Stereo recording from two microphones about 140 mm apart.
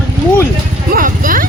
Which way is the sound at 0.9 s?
80° right.